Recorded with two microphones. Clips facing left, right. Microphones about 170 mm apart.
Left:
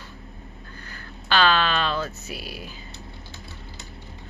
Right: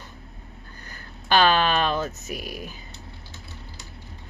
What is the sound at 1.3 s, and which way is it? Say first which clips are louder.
Speech: right 2 dB; 45° right (ahead or behind).